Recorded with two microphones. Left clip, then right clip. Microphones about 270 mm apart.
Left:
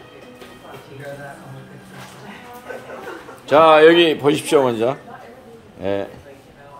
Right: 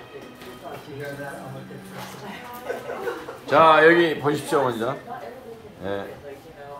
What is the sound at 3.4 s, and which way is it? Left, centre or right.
Speech, left.